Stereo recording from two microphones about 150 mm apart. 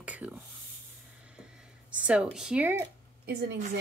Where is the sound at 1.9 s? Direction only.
10° right (ahead or behind).